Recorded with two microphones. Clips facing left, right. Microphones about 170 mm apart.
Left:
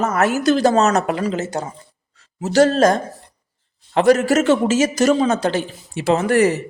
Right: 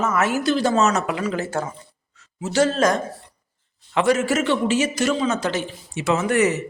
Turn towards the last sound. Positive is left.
turn(degrees=35)  # may be behind; listen again after turning